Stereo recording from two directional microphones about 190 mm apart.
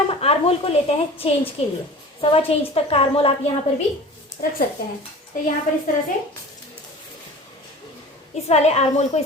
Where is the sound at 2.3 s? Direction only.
30° left (ahead or behind).